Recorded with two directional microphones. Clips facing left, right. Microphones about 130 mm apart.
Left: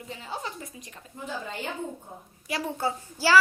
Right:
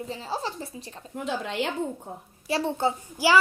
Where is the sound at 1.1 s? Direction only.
85° right.